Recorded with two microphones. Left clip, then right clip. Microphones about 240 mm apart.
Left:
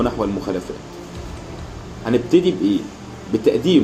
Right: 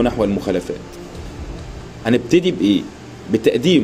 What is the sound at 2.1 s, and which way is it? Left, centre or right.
A man's voice, right.